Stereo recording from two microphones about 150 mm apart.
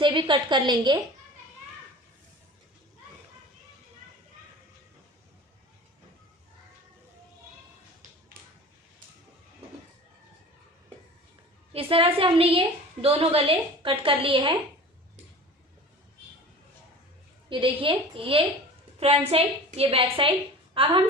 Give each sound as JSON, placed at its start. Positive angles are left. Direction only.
{"t": 0.0, "sound": "a woman's voice", "side_deg": -35}
{"t": 11.7, "sound": "a woman's voice", "side_deg": -40}
{"t": 17.5, "sound": "a woman's voice", "side_deg": -35}